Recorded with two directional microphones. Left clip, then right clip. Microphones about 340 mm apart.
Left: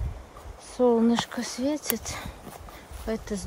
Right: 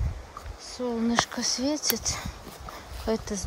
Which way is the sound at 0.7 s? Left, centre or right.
Centre.